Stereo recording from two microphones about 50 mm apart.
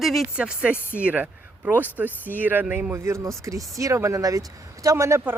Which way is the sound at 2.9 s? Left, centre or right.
Right.